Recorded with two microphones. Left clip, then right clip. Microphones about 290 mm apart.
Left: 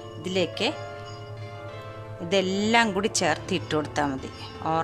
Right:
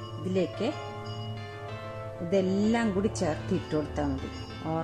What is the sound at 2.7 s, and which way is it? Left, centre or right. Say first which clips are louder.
Speech: left 7 dB; left.